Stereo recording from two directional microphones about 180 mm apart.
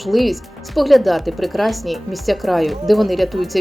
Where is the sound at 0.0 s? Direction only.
Centre (ahead or behind).